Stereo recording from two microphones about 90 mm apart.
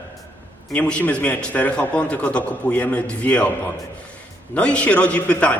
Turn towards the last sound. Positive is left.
turn(degrees=15)  # may be behind; listen again after turning